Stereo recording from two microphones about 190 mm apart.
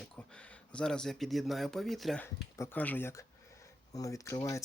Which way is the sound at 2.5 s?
10° left (ahead or behind).